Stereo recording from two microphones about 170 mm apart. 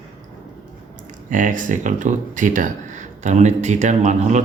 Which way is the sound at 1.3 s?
50° right (ahead or behind).